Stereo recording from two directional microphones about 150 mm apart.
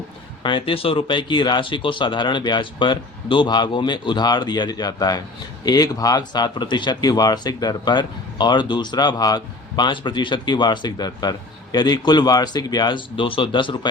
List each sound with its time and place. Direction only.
0.4 s speech: 35° left (ahead or behind)